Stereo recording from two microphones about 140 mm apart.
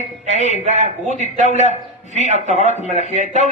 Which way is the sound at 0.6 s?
55° right (ahead or behind).